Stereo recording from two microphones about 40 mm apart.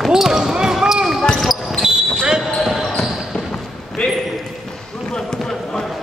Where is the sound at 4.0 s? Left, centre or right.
Left.